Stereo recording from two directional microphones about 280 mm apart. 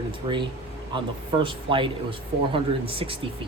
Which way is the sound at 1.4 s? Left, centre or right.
Centre.